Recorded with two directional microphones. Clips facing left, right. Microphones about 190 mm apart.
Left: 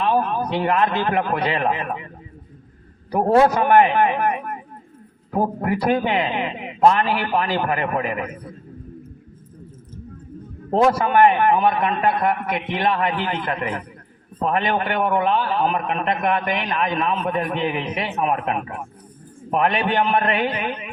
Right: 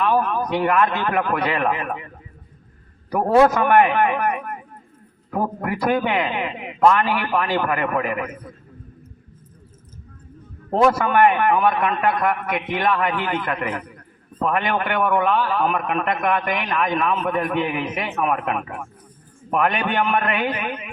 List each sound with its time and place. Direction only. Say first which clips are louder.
0.0 s a man's voice: even; 25° left (ahead or behind)
3.1 s a man's voice: even; 30° left (ahead or behind)
5.8 s a man's voice: right 1 dB; 30° left (ahead or behind)
10.8 s a man's voice: even; 30° left (ahead or behind)